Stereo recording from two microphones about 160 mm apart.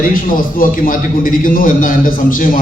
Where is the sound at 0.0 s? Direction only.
60° left (ahead or behind).